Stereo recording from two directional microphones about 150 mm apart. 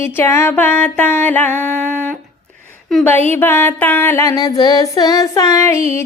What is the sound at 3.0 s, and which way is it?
Music, 10° left (ahead or behind).